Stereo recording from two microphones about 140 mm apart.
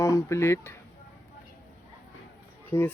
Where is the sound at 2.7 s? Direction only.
15° left (ahead or behind).